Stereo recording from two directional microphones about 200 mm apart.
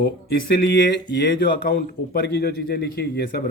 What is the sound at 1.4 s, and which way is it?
Speech, 45° left (ahead or behind).